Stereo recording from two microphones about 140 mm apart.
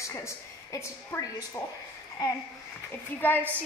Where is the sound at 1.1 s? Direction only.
15° left (ahead or behind).